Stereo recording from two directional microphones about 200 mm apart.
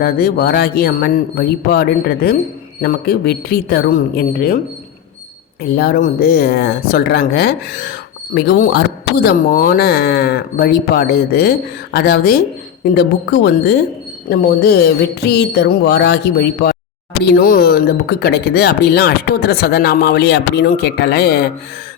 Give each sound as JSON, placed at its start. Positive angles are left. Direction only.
{"t": 0.0, "sound": "speech", "side_deg": 50}
{"t": 5.7, "sound": "speech", "side_deg": 50}